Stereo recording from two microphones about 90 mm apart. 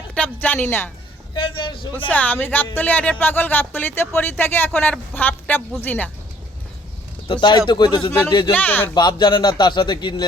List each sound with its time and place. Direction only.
0.1 s a woman's voice: 15° left (ahead or behind)
1.4 s a man's voice: 70° left (ahead or behind)
2.0 s speech: 20° left (ahead or behind)
7.3 s speech: 60° left (ahead or behind)
8.5 s speech: 20° left (ahead or behind)
9.0 s speech: 50° left (ahead or behind)